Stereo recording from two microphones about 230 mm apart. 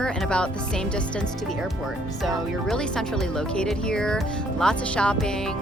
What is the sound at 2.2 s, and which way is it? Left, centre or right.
Speech, centre.